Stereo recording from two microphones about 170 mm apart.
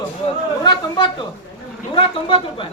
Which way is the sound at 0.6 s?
25° left (ahead or behind).